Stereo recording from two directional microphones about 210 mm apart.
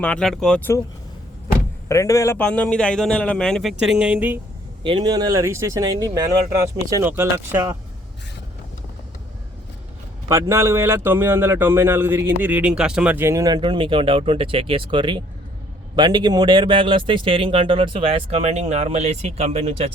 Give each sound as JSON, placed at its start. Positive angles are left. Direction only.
{"t": 0.0, "sound": "a man's voice", "side_deg": 5}
{"t": 1.9, "sound": "a man's voice", "side_deg": 15}
{"t": 4.8, "sound": "speech", "side_deg": -25}
{"t": 10.2, "sound": "speech", "side_deg": -15}